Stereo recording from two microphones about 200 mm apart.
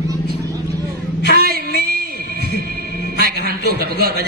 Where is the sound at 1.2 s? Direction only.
55° left (ahead or behind).